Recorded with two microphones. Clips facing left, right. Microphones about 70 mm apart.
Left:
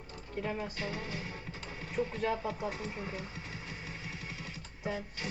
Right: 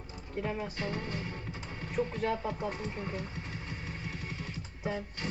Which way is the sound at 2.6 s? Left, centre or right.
Centre.